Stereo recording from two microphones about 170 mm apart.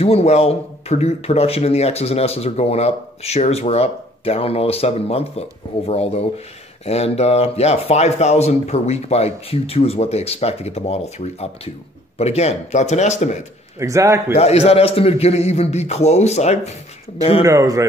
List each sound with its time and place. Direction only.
0.0 s a man's voice: 40° left (ahead or behind)
13.7 s speech: 20° right (ahead or behind)
14.3 s a man's voice: 35° left (ahead or behind)
17.4 s a man's voice: 20° right (ahead or behind)